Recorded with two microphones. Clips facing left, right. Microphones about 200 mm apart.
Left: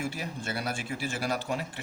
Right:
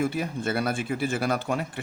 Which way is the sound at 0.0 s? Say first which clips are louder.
Right 8 dB; 55° right (ahead or behind).